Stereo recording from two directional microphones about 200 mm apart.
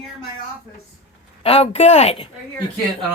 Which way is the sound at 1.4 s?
30° left (ahead or behind).